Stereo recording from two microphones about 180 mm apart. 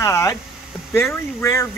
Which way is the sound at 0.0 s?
15° left (ahead or behind).